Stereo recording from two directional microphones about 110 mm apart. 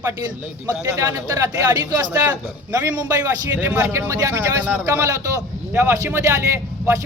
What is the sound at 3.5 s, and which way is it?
Speech, 20° right (ahead or behind).